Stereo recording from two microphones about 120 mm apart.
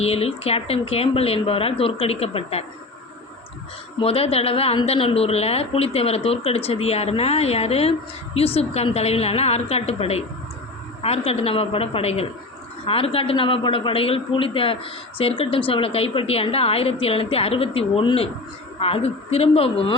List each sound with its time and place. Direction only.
0.0 s speech: 55° left (ahead or behind)
4.0 s a woman's voice: 55° left (ahead or behind)